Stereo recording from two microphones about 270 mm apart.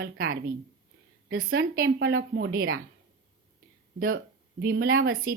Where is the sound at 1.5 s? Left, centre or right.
Right.